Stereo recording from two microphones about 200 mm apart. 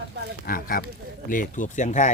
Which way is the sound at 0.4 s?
45° left (ahead or behind).